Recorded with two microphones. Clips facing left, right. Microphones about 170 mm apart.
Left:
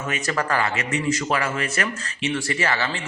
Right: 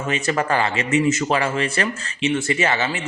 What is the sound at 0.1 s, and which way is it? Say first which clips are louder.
A man's voice: right 4 dB; 25° right (ahead or behind).